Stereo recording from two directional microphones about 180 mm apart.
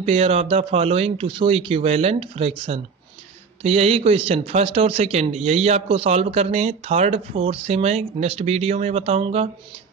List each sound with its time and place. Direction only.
0.0 s speech: 35° right (ahead or behind)